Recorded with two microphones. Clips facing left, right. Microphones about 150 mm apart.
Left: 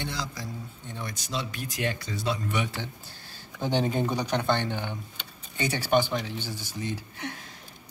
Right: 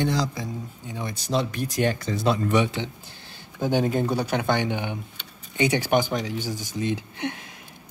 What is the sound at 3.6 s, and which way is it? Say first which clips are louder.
Speech: right 4 dB; 5° right (ahead or behind).